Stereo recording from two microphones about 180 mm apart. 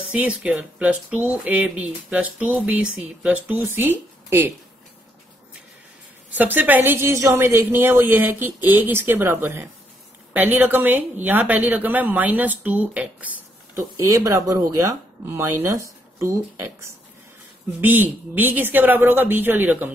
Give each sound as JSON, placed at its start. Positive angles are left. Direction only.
{"t": 0.1, "sound": "speech", "side_deg": -5}
{"t": 6.3, "sound": "speech", "side_deg": -10}
{"t": 17.7, "sound": "speech", "side_deg": -10}